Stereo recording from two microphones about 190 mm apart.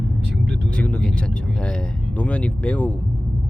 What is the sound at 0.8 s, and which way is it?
Speech, 5° left (ahead or behind).